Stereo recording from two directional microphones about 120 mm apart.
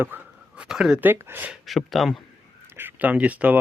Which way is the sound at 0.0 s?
10° right (ahead or behind).